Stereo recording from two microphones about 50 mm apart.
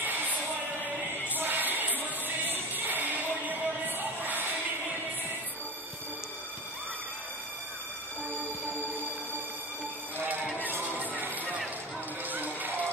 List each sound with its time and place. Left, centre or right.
0.0 s music: right
10.7 s music: right